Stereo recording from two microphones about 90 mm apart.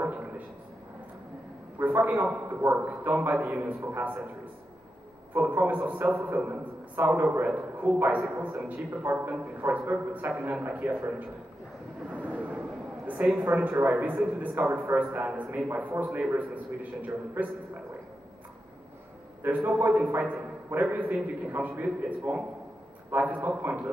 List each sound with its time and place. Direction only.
1.8 s a man's voice: 20° right (ahead or behind)
2.4 s a man's voice: 30° right (ahead or behind)
5.3 s a man's voice: 20° right (ahead or behind)
12.1 s a sound: 15° right (ahead or behind)
13.4 s a man's voice: 20° right (ahead or behind)
19.4 s a man's voice: 20° right (ahead or behind)